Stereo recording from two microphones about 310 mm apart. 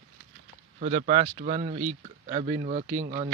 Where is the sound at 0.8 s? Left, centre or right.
Right.